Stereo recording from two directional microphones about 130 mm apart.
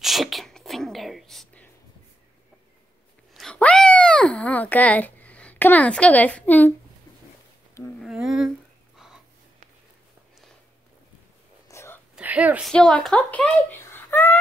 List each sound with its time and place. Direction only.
0.0 s sneeze: centre (ahead or behind)
3.3 s wail: 5° left (ahead or behind)
8.0 s humming: centre (ahead or behind)
11.7 s whispering: 20° left (ahead or behind)
12.2 s a sound: 10° right (ahead or behind)
12.6 s speech: 5° left (ahead or behind)